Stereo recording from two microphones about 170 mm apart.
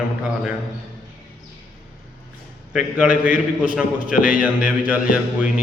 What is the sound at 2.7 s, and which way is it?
A man's voice, 5° right (ahead or behind).